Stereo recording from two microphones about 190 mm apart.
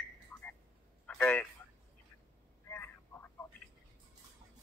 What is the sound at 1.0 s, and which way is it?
Telephone, 10° left (ahead or behind).